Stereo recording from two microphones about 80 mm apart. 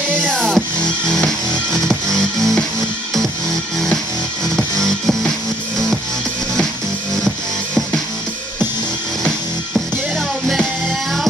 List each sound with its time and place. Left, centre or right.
0.2 s music: centre
4.6 s music: centre